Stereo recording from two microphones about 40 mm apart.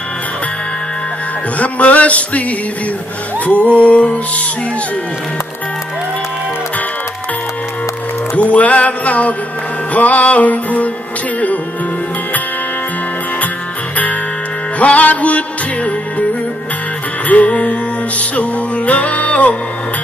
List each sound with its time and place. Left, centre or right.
1.6 s music: left
3.4 s music: left
8.4 s music: left
14.8 s music: left
17.3 s music: left